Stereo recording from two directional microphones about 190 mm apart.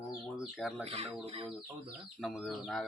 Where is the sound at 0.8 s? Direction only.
35° right (ahead or behind).